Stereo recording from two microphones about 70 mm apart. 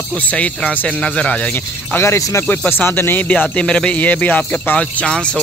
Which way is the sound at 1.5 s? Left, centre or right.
Left.